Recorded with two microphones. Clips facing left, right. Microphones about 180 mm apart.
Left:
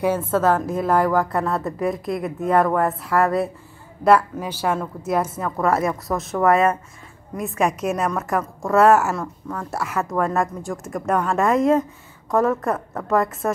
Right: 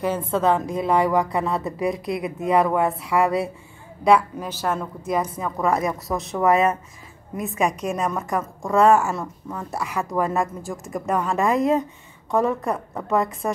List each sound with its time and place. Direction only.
0.0 s a woman's voice: 10° left (ahead or behind)
5.7 s speech: 20° right (ahead or behind)
6.0 s speech: centre (ahead or behind)